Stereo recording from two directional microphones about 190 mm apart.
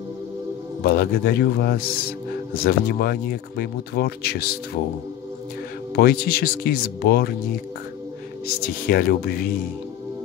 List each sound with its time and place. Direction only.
0.8 s speech: 55° left (ahead or behind)
5.9 s speech: 55° left (ahead or behind)
8.8 s speech: 50° left (ahead or behind)